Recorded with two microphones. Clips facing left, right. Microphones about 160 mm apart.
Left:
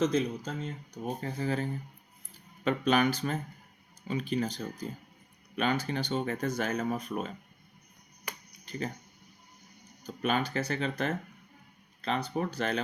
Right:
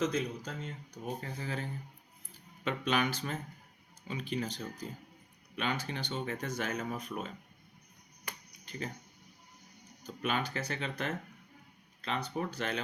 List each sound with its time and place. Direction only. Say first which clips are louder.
0.0 s speech: left 5 dB; 30° left (ahead or behind)
1.2 s speech: left 7 dB; 40° left (ahead or behind)
2.6 s speech: left 6 dB; 40° left (ahead or behind)
8.3 s a sound: left 4 dB; 40° left (ahead or behind)
10.2 s speech: left 5 dB; 40° left (ahead or behind)